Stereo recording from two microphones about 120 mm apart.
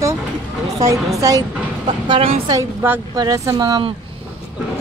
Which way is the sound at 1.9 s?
45° right (ahead or behind).